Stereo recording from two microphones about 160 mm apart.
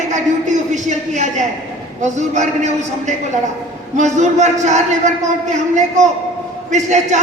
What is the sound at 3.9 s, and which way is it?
A man's voice, 45° right (ahead or behind).